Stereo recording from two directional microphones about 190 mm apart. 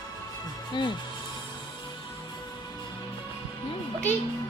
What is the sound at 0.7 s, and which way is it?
Music, 25° left (ahead or behind).